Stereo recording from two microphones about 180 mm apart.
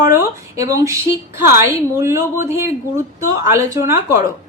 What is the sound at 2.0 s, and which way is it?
A woman's voice, 15° right (ahead or behind).